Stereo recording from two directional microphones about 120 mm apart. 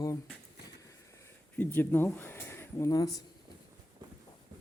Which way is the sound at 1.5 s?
15° left (ahead or behind).